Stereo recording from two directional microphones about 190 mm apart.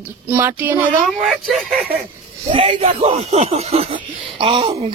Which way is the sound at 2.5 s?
25° right (ahead or behind).